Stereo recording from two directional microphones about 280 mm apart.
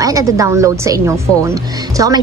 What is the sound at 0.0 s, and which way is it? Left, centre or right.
A woman's voice, centre.